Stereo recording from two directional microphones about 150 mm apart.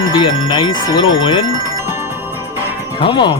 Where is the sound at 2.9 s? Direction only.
35° left (ahead or behind).